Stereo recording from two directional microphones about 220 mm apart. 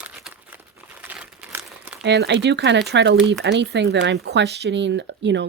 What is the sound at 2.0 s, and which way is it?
Speech, 50° right (ahead or behind).